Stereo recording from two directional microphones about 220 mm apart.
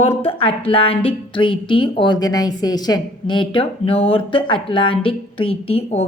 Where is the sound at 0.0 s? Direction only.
25° left (ahead or behind).